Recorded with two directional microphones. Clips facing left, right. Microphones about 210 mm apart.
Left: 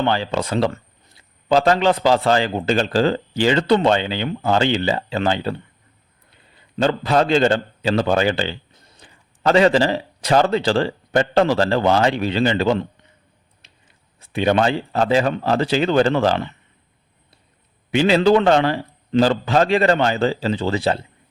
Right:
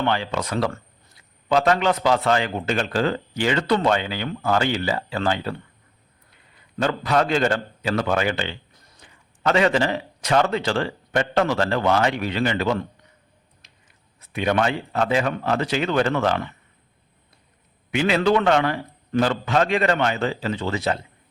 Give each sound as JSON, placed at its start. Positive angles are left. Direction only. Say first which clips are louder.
{"t": 0.0, "sound": "a man's voice", "louder": "left 3 dB", "side_deg": 30}
{"t": 17.9, "sound": "a man's voice", "louder": "left 5 dB", "side_deg": 30}